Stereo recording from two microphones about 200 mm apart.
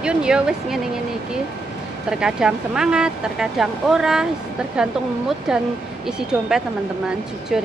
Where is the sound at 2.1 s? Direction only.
5° right (ahead or behind).